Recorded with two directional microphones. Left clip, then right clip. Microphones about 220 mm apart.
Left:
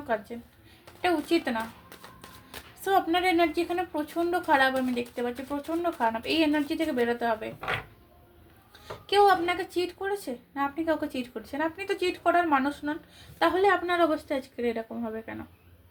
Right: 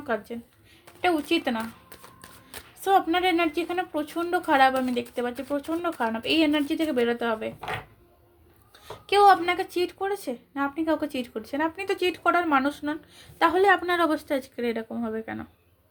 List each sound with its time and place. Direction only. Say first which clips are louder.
1.0 s a woman's voice: right 2 dB; 45° right (ahead or behind)
2.8 s a woman's voice: right 3 dB; 50° right (ahead or behind)
9.0 s a woman's voice: right 3 dB; 50° right (ahead or behind)